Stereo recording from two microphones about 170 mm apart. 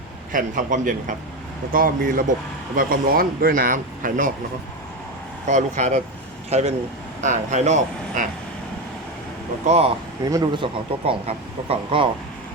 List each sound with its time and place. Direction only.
0.3 s a man's voice: 50° right (ahead or behind)
5.5 s a man's voice: 45° right (ahead or behind)
9.6 s speech: 40° right (ahead or behind)
10.2 s speech: 20° right (ahead or behind)